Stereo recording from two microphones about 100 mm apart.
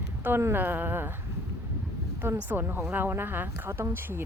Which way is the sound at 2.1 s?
20° right (ahead or behind).